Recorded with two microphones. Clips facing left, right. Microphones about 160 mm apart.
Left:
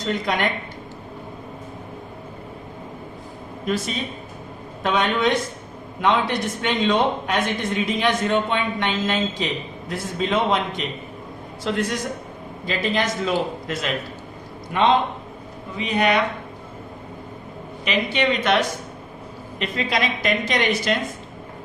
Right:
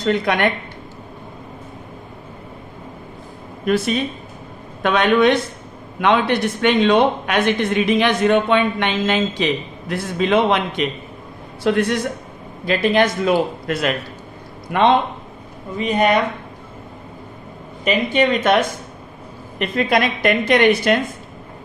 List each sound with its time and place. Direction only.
0.0 s a woman's voice: 60° right (ahead or behind)
3.7 s a woman's voice: 60° right (ahead or behind)
15.8 s speech: 45° right (ahead or behind)
17.8 s a woman's voice: 45° right (ahead or behind)